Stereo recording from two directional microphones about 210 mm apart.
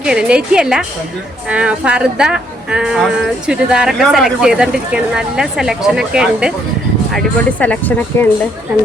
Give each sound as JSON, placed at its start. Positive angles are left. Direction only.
{"t": 0.0, "sound": "speech", "side_deg": -5}
{"t": 7.6, "sound": "speech", "side_deg": 10}